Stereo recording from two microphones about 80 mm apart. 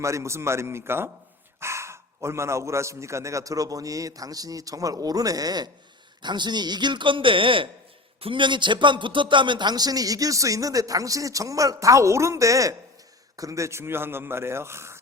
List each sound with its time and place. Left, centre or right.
0.0 s a man's voice: right
6.2 s a man's voice: right